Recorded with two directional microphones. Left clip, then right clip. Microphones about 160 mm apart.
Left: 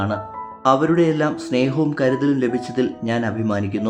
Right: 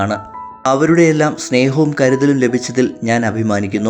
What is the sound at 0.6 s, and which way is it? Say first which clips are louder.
Speech: right 4 dB; 25° right (ahead or behind).